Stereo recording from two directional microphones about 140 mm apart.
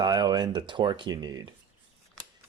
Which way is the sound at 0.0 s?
30° right (ahead or behind).